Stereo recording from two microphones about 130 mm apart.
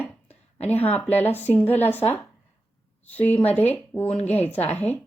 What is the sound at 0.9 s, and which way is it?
Speech, 15° left (ahead or behind).